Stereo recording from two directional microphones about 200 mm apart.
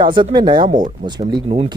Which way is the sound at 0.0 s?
25° right (ahead or behind).